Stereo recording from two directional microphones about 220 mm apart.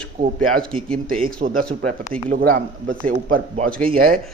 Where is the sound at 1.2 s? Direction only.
40° right (ahead or behind).